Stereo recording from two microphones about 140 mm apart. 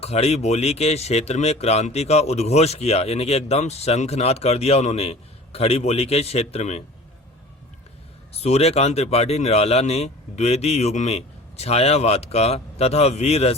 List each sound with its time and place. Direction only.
0.0 s speech: 50° left (ahead or behind)
8.3 s speech: 50° left (ahead or behind)